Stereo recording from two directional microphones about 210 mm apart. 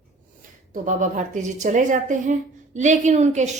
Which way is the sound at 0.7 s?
35° right (ahead or behind).